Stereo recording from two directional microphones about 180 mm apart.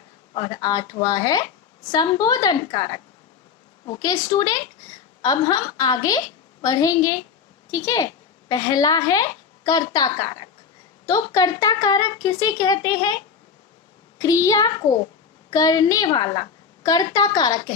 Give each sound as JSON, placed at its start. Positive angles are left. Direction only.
{"t": 0.3, "sound": "a woman's voice", "side_deg": 25}
{"t": 14.2, "sound": "a woman's voice", "side_deg": 20}